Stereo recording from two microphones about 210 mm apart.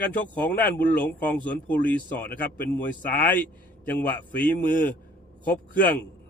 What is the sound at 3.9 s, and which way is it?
Speech, 10° left (ahead or behind).